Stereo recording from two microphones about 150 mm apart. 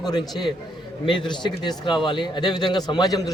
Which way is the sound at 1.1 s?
30° left (ahead or behind).